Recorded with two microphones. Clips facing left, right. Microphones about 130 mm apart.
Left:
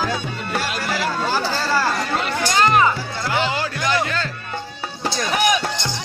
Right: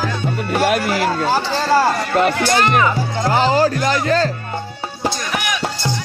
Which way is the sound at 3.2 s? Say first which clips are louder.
Right 7 dB; 40° right (ahead or behind).